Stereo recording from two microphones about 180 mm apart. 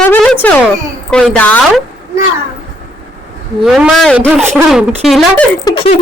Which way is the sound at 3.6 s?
Centre (ahead or behind).